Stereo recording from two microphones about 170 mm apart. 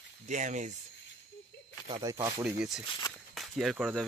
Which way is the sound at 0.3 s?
45° right (ahead or behind).